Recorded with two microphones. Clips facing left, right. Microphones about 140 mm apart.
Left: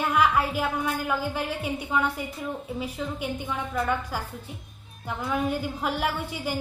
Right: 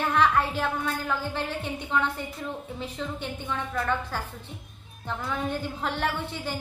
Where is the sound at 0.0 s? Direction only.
10° left (ahead or behind).